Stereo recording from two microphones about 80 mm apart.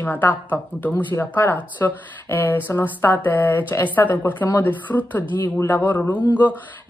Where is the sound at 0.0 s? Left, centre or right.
Left.